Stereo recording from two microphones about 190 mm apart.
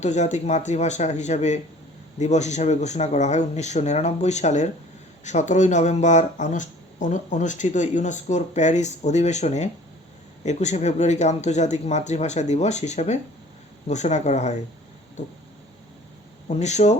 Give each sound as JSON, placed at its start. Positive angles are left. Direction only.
{"t": 0.0, "sound": "speech", "side_deg": 40}
{"t": 16.5, "sound": "speech", "side_deg": 35}